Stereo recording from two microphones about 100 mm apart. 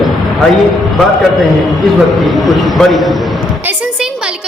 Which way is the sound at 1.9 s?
Centre (ahead or behind).